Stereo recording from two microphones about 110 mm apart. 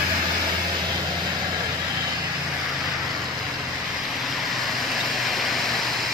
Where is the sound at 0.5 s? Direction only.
40° right (ahead or behind).